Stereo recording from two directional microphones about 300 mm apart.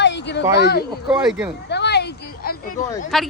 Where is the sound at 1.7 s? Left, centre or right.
Left.